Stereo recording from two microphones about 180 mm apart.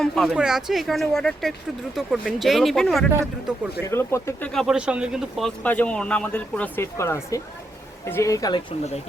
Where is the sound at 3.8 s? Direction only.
15° left (ahead or behind).